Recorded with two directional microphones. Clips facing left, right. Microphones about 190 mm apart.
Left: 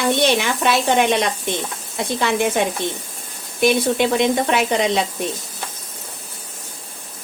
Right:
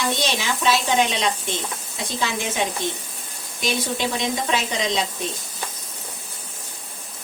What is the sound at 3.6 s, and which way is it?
Speech, 60° left (ahead or behind).